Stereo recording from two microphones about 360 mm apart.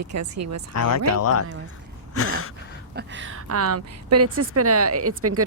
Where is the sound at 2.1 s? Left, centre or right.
Left.